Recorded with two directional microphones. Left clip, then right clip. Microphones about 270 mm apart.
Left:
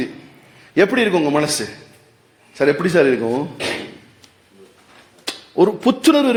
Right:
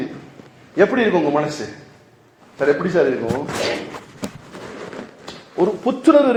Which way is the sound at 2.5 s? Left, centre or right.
Left.